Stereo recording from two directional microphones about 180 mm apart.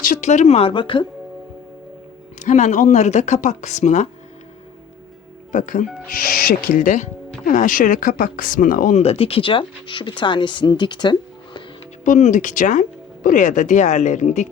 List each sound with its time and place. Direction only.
0.0 s speech: 45° left (ahead or behind); by 1.0 s 25° left (ahead or behind)
2.4 s speech: 40° left (ahead or behind)
5.5 s speech: 45° left (ahead or behind); by 11.6 s 25° left (ahead or behind)
12.0 s speech: 45° left (ahead or behind)